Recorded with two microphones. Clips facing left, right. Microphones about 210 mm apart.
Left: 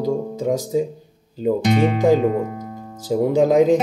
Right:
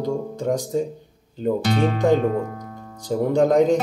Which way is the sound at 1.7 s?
15° left (ahead or behind).